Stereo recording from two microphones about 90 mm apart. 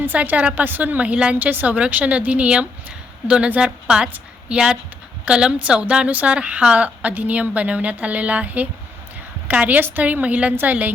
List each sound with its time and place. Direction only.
0.0 s a woman's voice: 15° right (ahead or behind)